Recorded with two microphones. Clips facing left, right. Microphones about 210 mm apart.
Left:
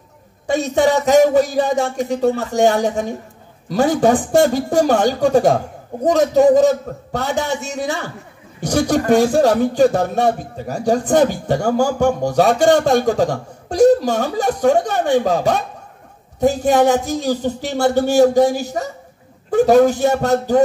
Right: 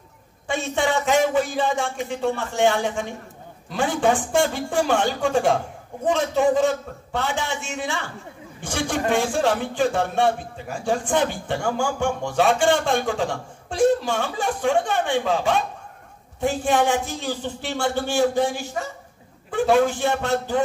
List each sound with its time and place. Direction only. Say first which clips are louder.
0.5 s speech: left 8 dB; 40° left (ahead or behind)